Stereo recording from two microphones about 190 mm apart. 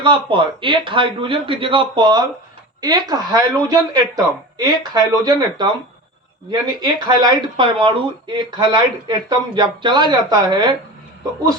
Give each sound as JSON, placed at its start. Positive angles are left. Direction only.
{"t": 0.0, "sound": "speech", "side_deg": -25}